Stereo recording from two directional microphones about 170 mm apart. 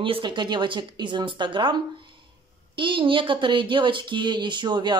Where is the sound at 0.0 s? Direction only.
30° right (ahead or behind).